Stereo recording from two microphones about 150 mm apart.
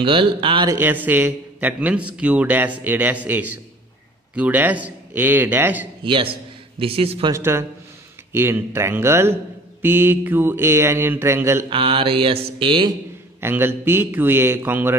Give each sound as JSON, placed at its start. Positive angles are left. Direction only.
{"t": 0.0, "sound": "mantra", "side_deg": -35}
{"t": 0.7, "sound": "a man's voice", "side_deg": -15}
{"t": 6.8, "sound": "mantra", "side_deg": -40}
{"t": 7.3, "sound": "a man's voice", "side_deg": -15}
{"t": 11.7, "sound": "mantra", "side_deg": -35}
{"t": 13.4, "sound": "a man's voice", "side_deg": -15}